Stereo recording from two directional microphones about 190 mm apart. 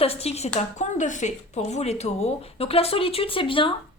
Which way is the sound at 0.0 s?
30° left (ahead or behind).